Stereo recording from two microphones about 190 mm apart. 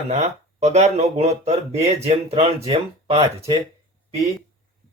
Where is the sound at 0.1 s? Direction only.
35° right (ahead or behind).